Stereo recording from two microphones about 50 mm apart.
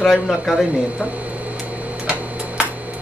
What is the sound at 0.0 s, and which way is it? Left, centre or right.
Speech, centre.